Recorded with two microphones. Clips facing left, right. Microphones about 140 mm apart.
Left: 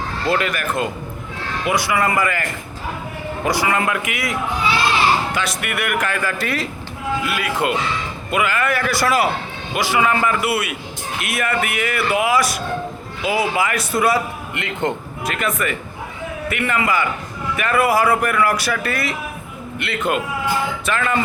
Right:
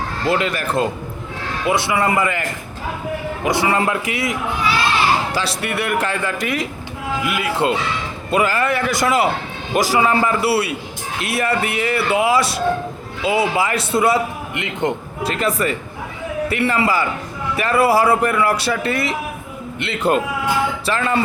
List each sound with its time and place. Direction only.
0.3 s a man's voice: 20° right (ahead or behind)
3.4 s a man's voice: 25° right (ahead or behind)
6.4 s a man's voice: 15° right (ahead or behind)
9.7 s a man's voice: 40° right (ahead or behind); by 14.9 s 20° right (ahead or behind)
15.2 s a man's voice: 30° right (ahead or behind)